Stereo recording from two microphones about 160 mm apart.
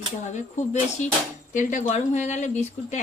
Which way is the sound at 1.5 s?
50° left (ahead or behind).